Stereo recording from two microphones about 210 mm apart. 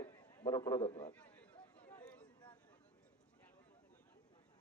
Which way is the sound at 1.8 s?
35° left (ahead or behind).